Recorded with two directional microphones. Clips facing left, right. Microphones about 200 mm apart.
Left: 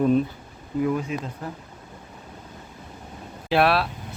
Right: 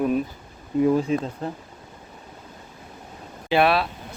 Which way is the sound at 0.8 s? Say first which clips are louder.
Right 5 dB; 30° right (ahead or behind).